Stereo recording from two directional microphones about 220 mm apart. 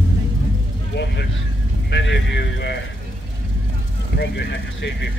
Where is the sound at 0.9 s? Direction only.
50° left (ahead or behind).